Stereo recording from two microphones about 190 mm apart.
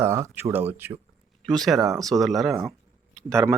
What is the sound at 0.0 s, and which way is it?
Speech, 15° right (ahead or behind).